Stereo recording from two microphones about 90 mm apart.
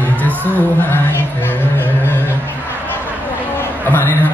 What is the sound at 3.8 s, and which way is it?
Chatter, 25° left (ahead or behind).